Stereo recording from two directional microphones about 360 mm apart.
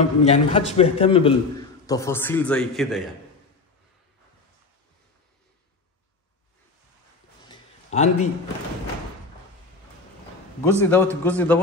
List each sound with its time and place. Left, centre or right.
0.2 s a man's voice: centre
7.4 s a sound: centre
10.6 s a man's voice: centre